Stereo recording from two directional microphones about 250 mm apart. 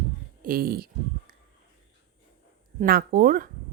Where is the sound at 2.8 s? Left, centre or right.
Right.